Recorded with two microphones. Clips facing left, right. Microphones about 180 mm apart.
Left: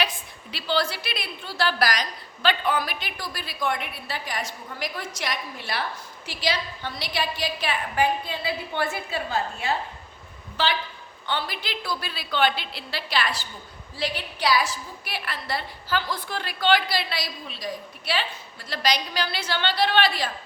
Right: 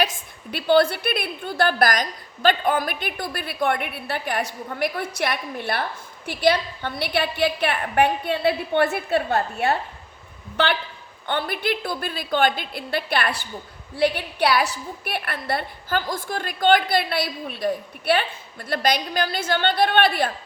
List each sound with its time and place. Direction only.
0.5 s a woman's voice: 55° right (ahead or behind)